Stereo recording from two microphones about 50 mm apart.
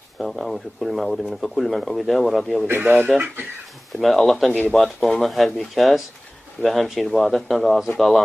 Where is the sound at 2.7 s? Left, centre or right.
Right.